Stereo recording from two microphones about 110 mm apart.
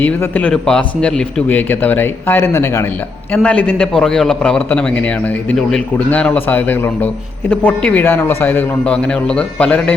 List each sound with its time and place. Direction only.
0.0 s a man's voice: 15° left (ahead or behind)
0.5 s a man's voice: 5° left (ahead or behind); by 2.8 s 25° left (ahead or behind)
3.3 s a man's voice: 10° left (ahead or behind)
8.8 s a man's voice: 10° left (ahead or behind)